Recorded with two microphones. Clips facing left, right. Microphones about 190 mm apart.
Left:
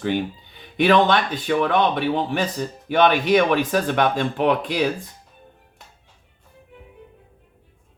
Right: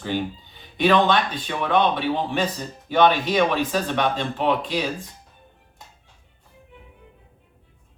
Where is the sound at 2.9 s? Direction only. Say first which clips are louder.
Left 2 dB; 60° left (ahead or behind).